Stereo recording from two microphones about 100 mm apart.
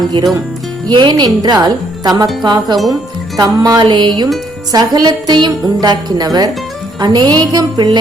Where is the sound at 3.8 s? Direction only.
50° right (ahead or behind).